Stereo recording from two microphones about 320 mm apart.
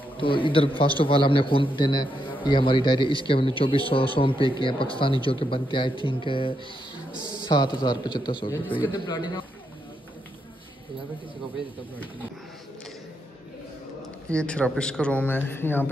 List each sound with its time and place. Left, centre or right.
0.2 s a man's voice: centre
14.3 s speech: centre